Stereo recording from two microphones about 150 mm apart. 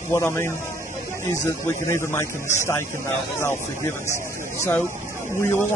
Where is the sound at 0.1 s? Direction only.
15° left (ahead or behind).